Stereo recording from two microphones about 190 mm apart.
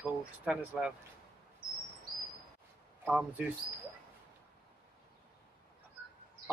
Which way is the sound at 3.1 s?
5° right (ahead or behind).